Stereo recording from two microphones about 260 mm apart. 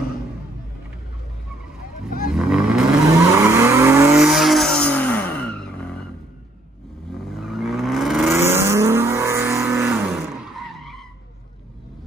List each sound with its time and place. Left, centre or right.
2.0 s vehicle: left
2.3 s vehicle: centre
7.2 s vehicle: centre